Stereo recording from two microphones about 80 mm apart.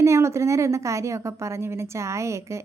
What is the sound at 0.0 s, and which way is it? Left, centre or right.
A woman's voice, right.